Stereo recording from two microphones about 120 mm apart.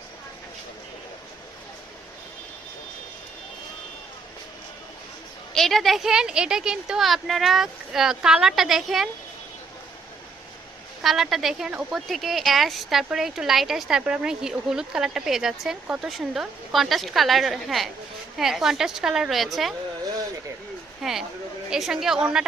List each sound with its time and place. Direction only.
5.5 s speech: centre (ahead or behind)
11.0 s speech: centre (ahead or behind)
21.0 s speech: centre (ahead or behind)